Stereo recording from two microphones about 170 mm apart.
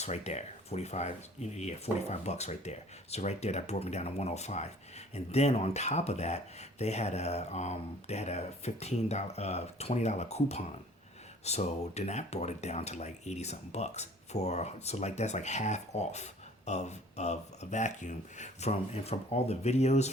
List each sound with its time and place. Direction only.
0.0 s speech: 40° left (ahead or behind)